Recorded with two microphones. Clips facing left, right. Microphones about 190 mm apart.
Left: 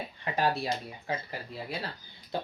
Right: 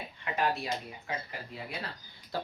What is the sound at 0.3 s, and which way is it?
Speech, 35° left (ahead or behind).